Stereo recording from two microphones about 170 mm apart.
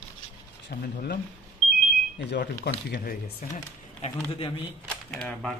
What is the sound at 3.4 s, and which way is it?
Speech, 50° left (ahead or behind).